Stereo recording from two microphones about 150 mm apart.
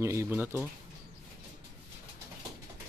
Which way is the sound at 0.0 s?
20° right (ahead or behind).